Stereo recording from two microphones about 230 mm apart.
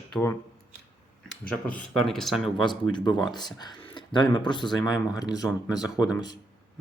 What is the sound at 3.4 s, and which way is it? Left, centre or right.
Speech, centre.